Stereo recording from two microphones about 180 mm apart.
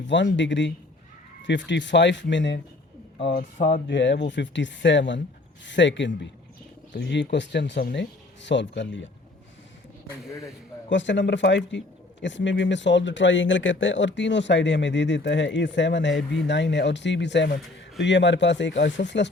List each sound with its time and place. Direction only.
0.0 s speech: 85° left
3.8 s speech: 80° left
6.9 s speech: 70° left (ahead or behind); by 9.0 s 90° left
10.8 s speech: 90° left